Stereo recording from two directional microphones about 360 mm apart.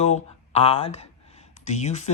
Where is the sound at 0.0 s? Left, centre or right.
Centre.